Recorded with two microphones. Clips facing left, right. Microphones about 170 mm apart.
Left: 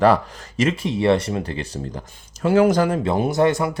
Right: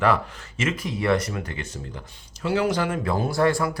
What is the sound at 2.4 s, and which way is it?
Speech, 50° left (ahead or behind).